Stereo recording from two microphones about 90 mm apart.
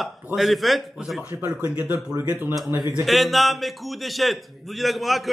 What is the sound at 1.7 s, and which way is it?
Speech, 15° right (ahead or behind).